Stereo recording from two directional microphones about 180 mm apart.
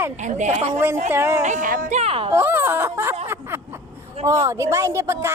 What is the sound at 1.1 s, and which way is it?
Speech, 15° right (ahead or behind).